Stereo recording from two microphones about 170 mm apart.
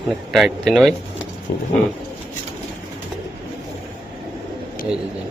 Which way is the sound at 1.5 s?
85° left.